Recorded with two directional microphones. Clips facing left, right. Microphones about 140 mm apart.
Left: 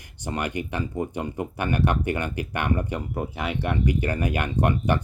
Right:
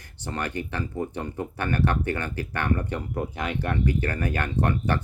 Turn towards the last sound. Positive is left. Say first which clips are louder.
# left 2 dB
turn(degrees=15)  # may be behind; listen again after turning